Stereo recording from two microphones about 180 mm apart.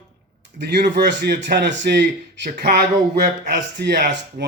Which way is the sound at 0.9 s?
70° right (ahead or behind).